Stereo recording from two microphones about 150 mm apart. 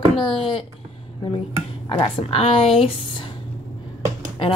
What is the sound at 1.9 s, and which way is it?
Speech, 35° left (ahead or behind).